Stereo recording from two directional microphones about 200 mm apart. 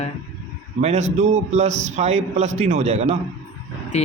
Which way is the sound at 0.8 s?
35° right (ahead or behind).